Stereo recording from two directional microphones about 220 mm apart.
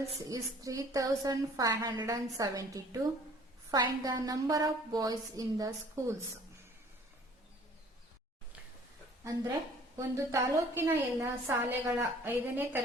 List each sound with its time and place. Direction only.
0.3 s a woman's voice: 15° right (ahead or behind)
10.0 s a woman's voice: 15° right (ahead or behind)